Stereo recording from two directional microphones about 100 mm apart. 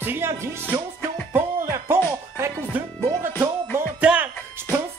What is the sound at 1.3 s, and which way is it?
Music, 20° right (ahead or behind).